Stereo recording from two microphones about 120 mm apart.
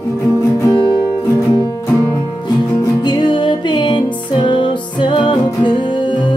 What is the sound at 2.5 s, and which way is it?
Music, 35° left (ahead or behind).